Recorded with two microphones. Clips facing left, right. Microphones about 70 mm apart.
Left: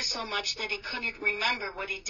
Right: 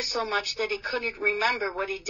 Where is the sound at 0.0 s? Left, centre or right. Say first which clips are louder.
Right 6 dB; right.